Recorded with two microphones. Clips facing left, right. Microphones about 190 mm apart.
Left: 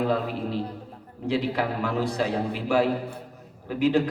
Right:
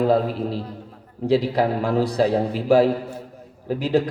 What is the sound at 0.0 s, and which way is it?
A man's voice, 35° right (ahead or behind).